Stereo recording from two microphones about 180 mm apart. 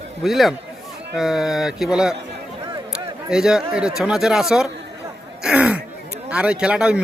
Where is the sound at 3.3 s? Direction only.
5° right (ahead or behind).